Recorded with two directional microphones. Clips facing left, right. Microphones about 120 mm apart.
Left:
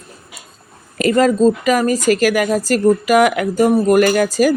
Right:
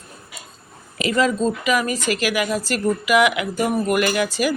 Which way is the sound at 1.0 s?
45° left (ahead or behind).